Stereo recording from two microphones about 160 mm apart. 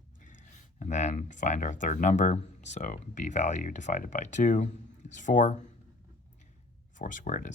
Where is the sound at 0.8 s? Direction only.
45° left (ahead or behind).